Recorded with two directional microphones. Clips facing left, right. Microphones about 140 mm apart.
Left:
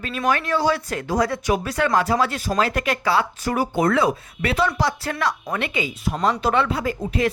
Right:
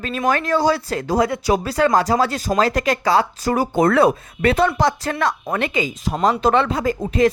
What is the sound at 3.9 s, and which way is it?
Speech, 55° right (ahead or behind).